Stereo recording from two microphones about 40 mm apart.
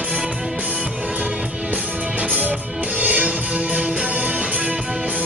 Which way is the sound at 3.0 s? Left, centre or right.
Right.